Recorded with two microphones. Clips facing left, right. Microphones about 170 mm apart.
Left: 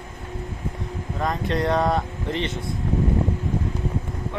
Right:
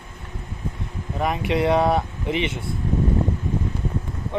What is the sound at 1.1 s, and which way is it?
Speech, 10° right (ahead or behind).